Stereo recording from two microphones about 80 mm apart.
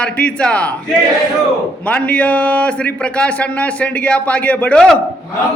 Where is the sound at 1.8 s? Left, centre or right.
Centre.